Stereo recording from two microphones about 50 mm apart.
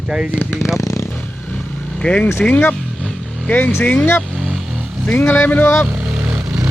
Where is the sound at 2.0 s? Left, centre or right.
Left.